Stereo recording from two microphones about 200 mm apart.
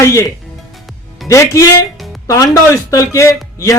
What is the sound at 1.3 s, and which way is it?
Speech, 15° left (ahead or behind).